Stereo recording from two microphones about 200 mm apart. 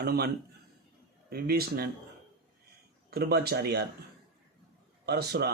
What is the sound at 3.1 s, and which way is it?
Speech, 50° right (ahead or behind).